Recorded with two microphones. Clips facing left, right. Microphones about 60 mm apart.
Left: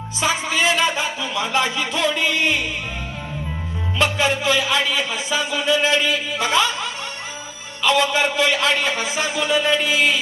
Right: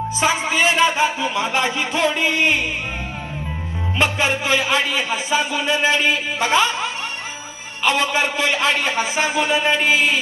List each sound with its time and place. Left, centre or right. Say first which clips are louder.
0.2 s speech: right 1 dB; right
3.9 s speech: even; right